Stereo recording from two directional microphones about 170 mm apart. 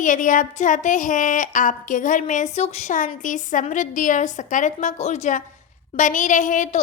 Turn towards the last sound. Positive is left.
turn(degrees=50)  # may be behind; listen again after turning